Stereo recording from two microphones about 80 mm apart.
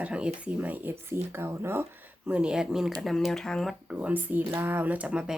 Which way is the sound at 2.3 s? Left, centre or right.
Centre.